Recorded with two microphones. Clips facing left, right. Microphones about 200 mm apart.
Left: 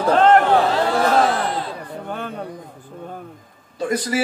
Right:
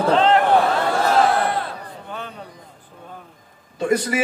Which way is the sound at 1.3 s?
60° right (ahead or behind).